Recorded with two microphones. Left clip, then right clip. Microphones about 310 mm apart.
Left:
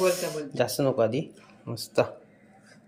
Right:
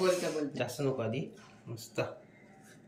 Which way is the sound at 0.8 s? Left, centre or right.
Centre.